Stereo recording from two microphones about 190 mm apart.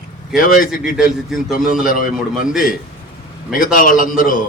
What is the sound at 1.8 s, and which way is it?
Speech, 45° left (ahead or behind).